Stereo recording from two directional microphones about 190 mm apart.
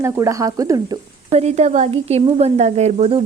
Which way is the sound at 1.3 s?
35° right (ahead or behind).